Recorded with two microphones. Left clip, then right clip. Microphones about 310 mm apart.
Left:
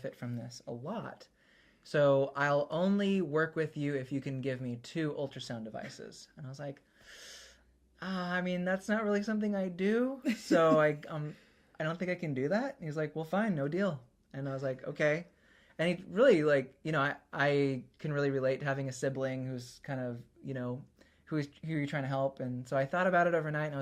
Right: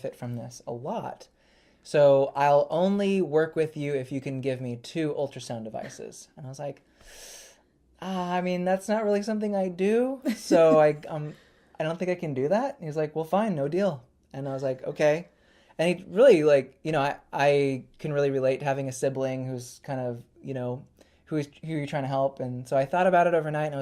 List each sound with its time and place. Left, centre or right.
0.9 s speech: right